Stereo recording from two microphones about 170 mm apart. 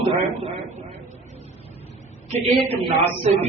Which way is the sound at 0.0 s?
35° right (ahead or behind).